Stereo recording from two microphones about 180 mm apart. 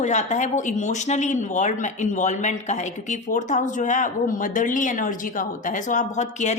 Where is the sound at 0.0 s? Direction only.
40° left (ahead or behind).